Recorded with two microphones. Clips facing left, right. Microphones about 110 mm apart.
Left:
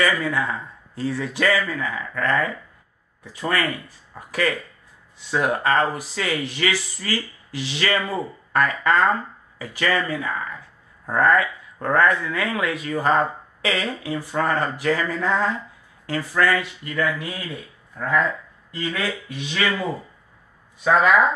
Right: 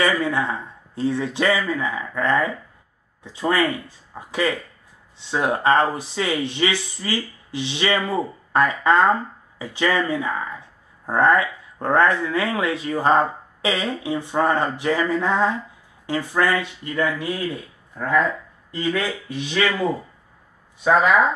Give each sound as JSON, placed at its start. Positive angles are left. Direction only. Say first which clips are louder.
{"t": 0.0, "sound": "speech", "louder": "right 1 dB", "side_deg": -25}
{"t": 18.7, "sound": "speech", "louder": "right 3 dB", "side_deg": -25}